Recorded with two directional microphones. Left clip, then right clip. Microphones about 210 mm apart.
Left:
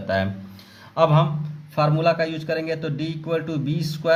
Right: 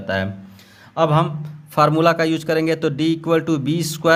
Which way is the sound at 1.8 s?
45° right (ahead or behind).